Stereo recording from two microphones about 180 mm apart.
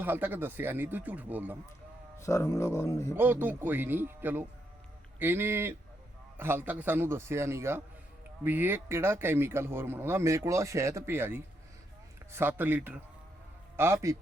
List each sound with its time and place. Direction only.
0.0 s speech: 10° right (ahead or behind)
2.1 s speech: 15° left (ahead or behind)
3.2 s speech: 10° right (ahead or behind)